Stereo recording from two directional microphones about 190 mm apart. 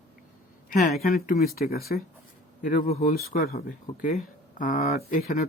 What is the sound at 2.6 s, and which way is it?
Speech, 40° left (ahead or behind).